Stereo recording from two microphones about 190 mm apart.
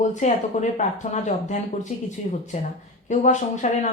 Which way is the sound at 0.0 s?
40° left (ahead or behind).